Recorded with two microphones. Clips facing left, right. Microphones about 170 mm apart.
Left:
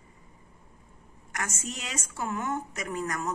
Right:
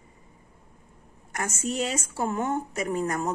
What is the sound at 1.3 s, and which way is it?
A woman's voice, 30° right (ahead or behind).